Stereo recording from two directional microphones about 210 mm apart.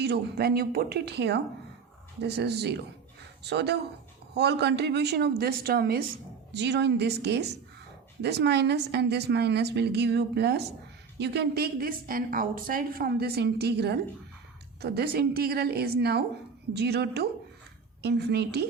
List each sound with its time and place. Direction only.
0.0 s a woman's voice: 50° right (ahead or behind)